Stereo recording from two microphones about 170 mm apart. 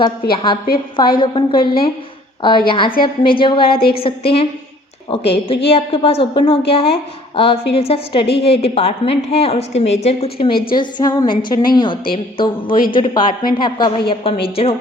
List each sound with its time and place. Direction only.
0.3 s a woman's voice: 30° left (ahead or behind)
10.8 s a woman's voice: 25° left (ahead or behind)
13.2 s a woman's voice: 60° left (ahead or behind)
13.6 s a woman's voice: 25° left (ahead or behind)